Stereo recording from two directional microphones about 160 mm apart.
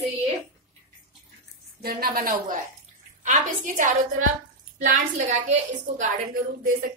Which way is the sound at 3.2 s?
50° right (ahead or behind).